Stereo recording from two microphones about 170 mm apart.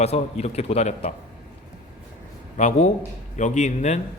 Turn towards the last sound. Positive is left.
turn(degrees=45)  # may be behind; listen again after turning